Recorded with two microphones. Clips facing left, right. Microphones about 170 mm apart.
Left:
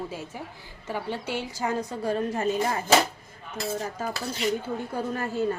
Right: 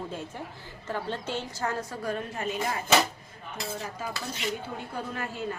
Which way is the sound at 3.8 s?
40° left (ahead or behind).